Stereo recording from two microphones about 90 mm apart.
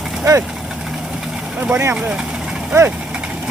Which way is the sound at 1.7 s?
25° right (ahead or behind).